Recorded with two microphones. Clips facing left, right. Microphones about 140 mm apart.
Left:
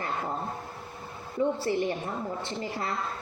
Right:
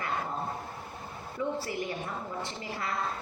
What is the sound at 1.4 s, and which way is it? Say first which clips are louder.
Speech: left 6 dB; 35° left (ahead or behind).